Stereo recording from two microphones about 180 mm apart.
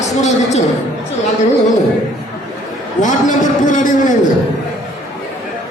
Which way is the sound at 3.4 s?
45° left (ahead or behind).